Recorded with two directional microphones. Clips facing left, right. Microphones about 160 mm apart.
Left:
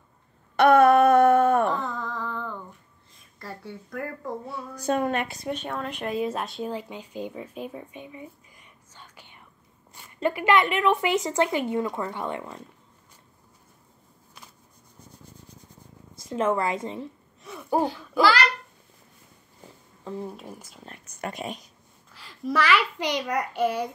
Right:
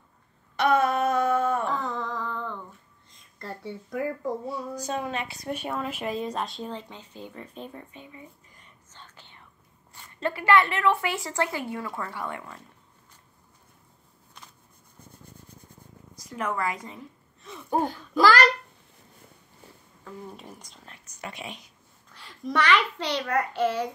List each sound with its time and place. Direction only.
0.6 s a sound: 60° left (ahead or behind)
1.8 s music: centre (ahead or behind)
3.3 s a child's voice: centre (ahead or behind)
4.7 s speech: 55° left (ahead or behind)
5.5 s speech: 5° right (ahead or behind)
8.0 s whispering: 20° left (ahead or behind)
9.9 s speech: 15° left (ahead or behind)
16.2 s speech: 25° left (ahead or behind)
17.4 s a sound: 15° left (ahead or behind)
18.2 s a child's voice: 50° right (ahead or behind)
20.3 s a child's voice: 5° left (ahead or behind)
20.9 s speech: 50° left (ahead or behind)
22.1 s a child's voice: centre (ahead or behind)